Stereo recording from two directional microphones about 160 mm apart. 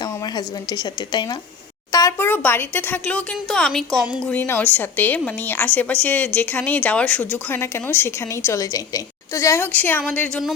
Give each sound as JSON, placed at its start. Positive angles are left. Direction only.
{"t": 0.0, "sound": "a woman's voice", "side_deg": 25}
{"t": 4.3, "sound": "a woman's voice", "side_deg": 10}